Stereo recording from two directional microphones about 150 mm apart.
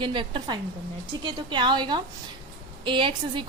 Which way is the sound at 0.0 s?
35° right (ahead or behind).